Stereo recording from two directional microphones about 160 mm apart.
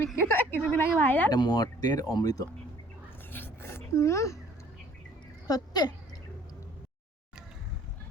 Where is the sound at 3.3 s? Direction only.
15° left (ahead or behind).